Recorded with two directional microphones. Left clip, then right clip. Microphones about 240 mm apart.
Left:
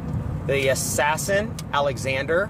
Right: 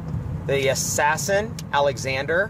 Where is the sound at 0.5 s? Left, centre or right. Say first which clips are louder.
Even; centre.